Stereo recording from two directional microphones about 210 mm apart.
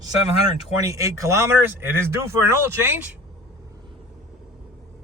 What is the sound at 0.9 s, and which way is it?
Speech, 15° right (ahead or behind).